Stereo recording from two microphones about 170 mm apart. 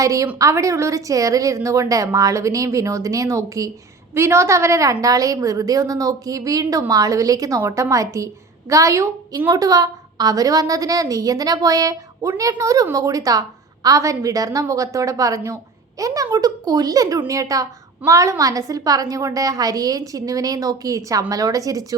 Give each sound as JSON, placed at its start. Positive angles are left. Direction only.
{"t": 0.0, "sound": "speech", "side_deg": -20}